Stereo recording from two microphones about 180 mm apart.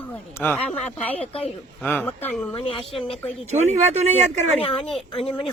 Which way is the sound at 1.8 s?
10° left (ahead or behind).